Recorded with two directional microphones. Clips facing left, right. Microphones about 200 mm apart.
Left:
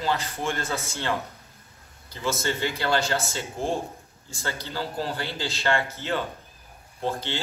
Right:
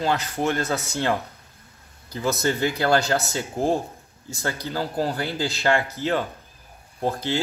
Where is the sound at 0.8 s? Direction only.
40° right (ahead or behind).